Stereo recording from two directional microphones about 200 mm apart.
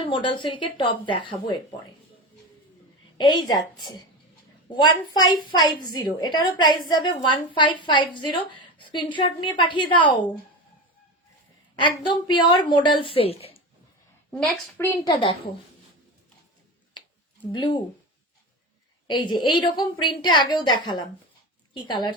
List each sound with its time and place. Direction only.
0.0 s a woman's voice: 25° left (ahead or behind)
3.2 s a woman's voice: 20° left (ahead or behind)
11.8 s a woman's voice: 25° left (ahead or behind)
14.3 s a woman's voice: 5° left (ahead or behind)
15.0 s a woman's voice: 20° left (ahead or behind)
17.5 s a woman's voice: 25° left (ahead or behind)
19.0 s a woman's voice: 20° left (ahead or behind)